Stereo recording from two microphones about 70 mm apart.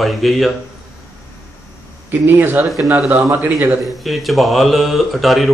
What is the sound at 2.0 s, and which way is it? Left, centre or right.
A man's voice, right.